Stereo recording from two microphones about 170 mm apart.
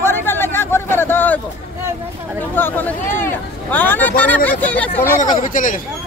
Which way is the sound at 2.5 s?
10° left (ahead or behind).